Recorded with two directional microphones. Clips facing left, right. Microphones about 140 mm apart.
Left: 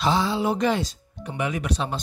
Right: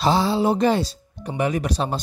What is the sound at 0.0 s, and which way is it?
Speech, 35° right (ahead or behind).